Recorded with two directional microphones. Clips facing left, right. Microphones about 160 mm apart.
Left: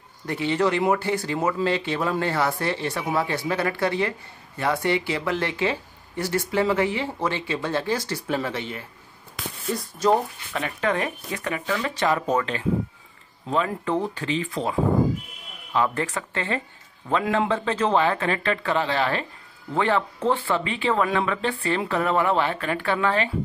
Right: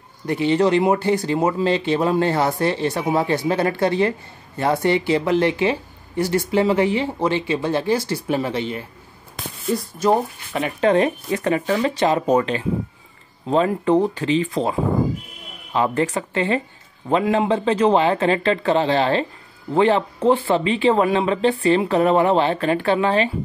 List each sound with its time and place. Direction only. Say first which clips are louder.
0.3 s speech: right 6 dB; 20° right (ahead or behind)
10.1 s speech: right 3 dB; 20° right (ahead or behind)
12.0 s speech: right 3 dB; 20° right (ahead or behind)
13.7 s speech: right 8 dB; 20° right (ahead or behind)